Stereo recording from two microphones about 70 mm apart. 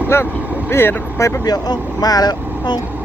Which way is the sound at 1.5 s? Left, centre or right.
Left.